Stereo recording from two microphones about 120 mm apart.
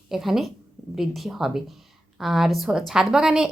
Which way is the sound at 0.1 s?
5° right (ahead or behind).